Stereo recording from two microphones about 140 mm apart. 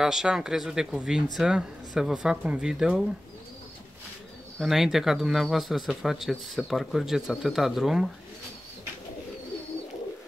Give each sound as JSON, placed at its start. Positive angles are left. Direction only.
{"t": 0.0, "sound": "speech", "side_deg": -5}
{"t": 4.6, "sound": "speech", "side_deg": 0}